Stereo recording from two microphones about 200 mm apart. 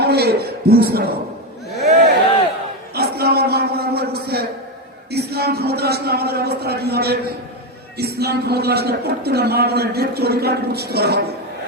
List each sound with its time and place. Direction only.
0.0 s a man's voice: 55° right (ahead or behind)
1.8 s a sound: 50° right (ahead or behind)
5.1 s a man's voice: 55° right (ahead or behind)